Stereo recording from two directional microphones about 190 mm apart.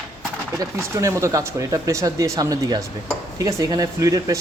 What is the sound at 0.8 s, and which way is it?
Speech, 15° right (ahead or behind).